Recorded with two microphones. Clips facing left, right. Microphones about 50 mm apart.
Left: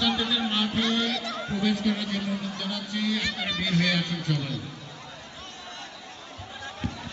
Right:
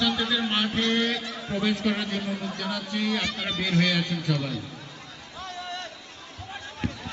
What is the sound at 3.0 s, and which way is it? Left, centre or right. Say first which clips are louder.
Speech: right 1 dB; right.